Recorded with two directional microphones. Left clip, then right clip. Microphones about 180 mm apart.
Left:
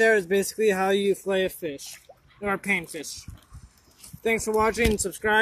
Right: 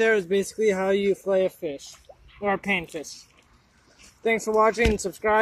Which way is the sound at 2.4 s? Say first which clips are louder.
Right 1 dB; 5° right (ahead or behind).